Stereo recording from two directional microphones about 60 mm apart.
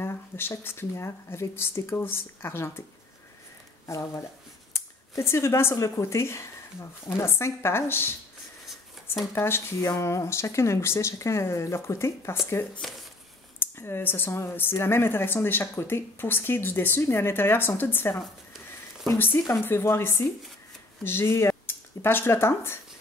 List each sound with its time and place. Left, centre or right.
0.0 s speech: left
3.8 s speech: left
4.7 s a sound: left
5.8 s speech: left
9.3 s speech: left
9.8 s speech: left
13.6 s speech: left